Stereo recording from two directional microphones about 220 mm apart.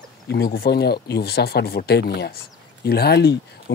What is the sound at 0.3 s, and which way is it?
Speech, 45° left (ahead or behind).